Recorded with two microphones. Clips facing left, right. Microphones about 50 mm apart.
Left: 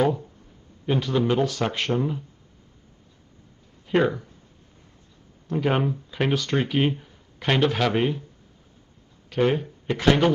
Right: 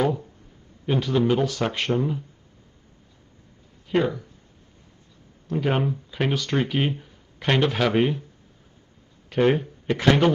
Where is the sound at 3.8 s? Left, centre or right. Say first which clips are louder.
Left 1 dB; centre.